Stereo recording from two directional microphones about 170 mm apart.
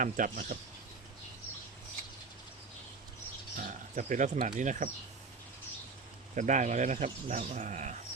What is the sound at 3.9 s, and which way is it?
Speech, 45° right (ahead or behind).